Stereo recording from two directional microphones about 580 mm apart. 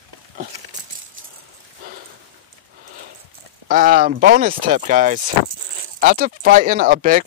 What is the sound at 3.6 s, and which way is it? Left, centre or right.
Speech, centre.